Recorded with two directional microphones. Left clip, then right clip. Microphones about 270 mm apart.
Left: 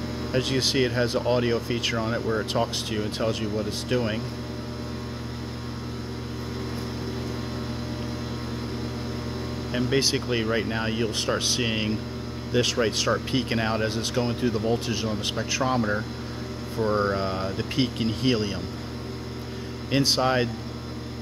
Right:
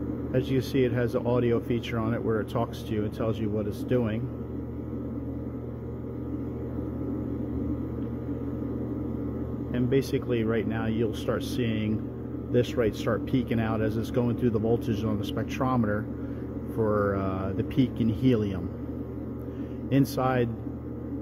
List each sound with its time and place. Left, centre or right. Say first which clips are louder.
0.3 s speech: left 4 dB; centre
9.8 s speech: left 3 dB; centre
19.9 s speech: left 4 dB; centre